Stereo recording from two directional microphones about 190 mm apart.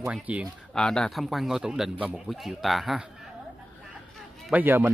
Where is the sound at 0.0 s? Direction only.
5° right (ahead or behind).